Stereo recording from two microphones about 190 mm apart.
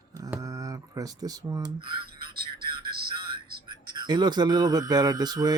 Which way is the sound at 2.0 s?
55° right (ahead or behind).